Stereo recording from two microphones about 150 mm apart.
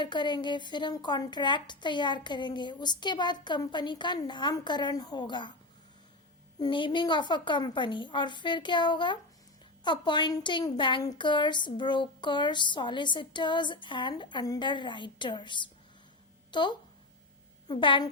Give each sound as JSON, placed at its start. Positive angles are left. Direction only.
{"t": 0.0, "sound": "speech", "side_deg": 30}
{"t": 6.6, "sound": "speech", "side_deg": 30}